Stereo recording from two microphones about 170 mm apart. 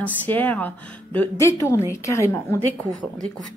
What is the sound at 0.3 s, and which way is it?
Speech, 10° left (ahead or behind).